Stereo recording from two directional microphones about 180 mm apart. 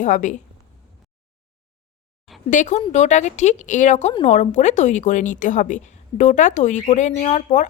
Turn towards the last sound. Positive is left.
turn(degrees=40)  # may be behind; listen again after turning